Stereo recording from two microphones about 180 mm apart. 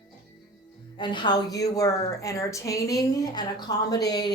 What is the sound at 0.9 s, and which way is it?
A woman's voice, 25° left (ahead or behind).